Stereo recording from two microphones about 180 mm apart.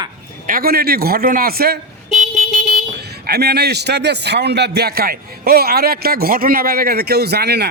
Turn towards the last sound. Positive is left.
turn(degrees=-65)  # may be behind; listen again after turning